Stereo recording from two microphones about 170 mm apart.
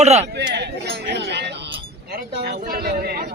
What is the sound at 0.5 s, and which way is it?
Chink, 80° right.